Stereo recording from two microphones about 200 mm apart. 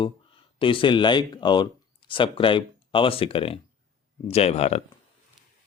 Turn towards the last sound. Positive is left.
turn(degrees=30)  # may be behind; listen again after turning